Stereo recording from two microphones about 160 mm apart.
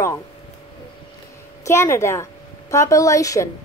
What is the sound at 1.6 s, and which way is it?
A woman's voice, 15° left (ahead or behind).